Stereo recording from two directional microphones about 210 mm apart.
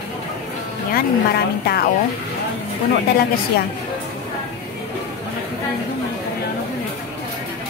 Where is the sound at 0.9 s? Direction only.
45° left (ahead or behind).